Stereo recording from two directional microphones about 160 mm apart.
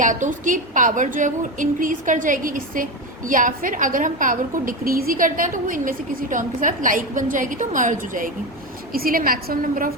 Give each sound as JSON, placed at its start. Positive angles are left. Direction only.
{"t": 0.0, "sound": "a woman's voice", "side_deg": -55}